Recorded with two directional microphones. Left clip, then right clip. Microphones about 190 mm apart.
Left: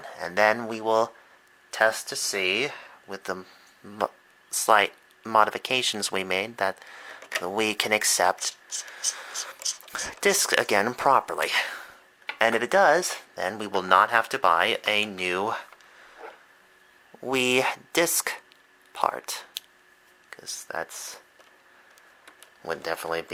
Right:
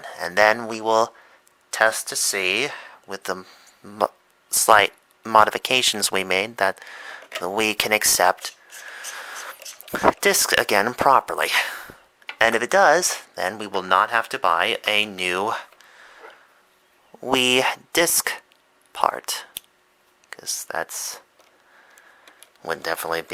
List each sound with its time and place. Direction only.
0.0 s speech: 15° right (ahead or behind)
22.6 s speech: 15° right (ahead or behind)